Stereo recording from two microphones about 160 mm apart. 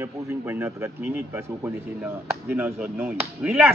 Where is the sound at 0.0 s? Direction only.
15° right (ahead or behind).